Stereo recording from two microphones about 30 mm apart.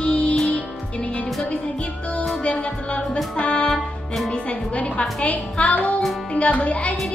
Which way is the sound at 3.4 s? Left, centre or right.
Left.